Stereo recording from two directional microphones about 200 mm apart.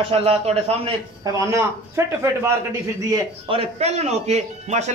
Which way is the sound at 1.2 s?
15° right (ahead or behind).